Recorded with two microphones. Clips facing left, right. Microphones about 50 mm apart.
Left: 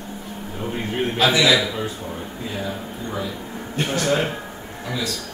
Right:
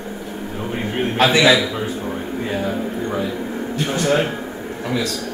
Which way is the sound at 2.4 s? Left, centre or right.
Right.